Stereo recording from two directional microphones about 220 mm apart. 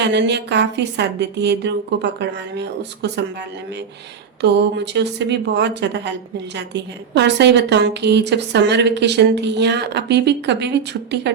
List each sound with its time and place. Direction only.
0.0 s a woman's voice: 50° right (ahead or behind)
4.4 s a woman's voice: 50° right (ahead or behind)